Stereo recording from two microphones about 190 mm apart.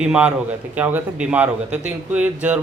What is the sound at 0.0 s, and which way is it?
A man's voice, 5° right (ahead or behind).